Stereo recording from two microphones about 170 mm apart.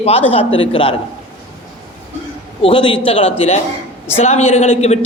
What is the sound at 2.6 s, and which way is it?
A woman's voice, 30° left (ahead or behind).